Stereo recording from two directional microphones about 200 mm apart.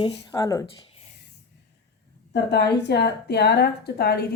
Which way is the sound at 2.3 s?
55° left (ahead or behind).